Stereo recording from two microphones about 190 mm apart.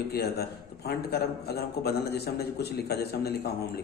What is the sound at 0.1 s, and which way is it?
Speech, 55° left (ahead or behind).